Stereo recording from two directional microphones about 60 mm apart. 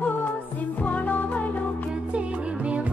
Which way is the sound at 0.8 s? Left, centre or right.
Left.